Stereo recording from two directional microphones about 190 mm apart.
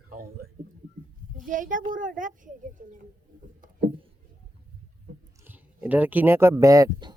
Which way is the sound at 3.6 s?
45° right (ahead or behind).